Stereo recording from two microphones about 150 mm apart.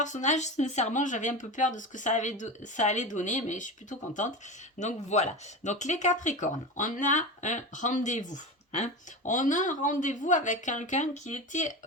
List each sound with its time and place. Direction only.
0.0 s speech: 55° left (ahead or behind)